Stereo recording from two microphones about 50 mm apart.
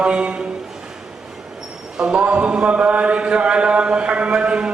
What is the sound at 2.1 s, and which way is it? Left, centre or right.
Mantra, right.